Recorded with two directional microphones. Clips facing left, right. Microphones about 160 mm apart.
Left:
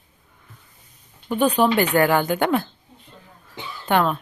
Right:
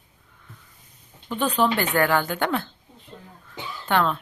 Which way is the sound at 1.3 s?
15° left (ahead or behind).